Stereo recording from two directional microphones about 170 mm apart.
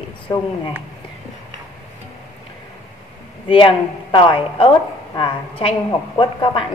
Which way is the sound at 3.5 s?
30° left (ahead or behind).